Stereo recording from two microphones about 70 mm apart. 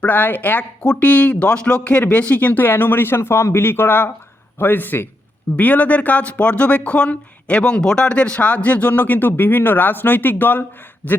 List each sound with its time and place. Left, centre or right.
0.0 s speech: left